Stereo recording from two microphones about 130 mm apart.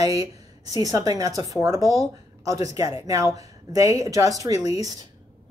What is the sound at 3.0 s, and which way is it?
Speech, 25° right (ahead or behind).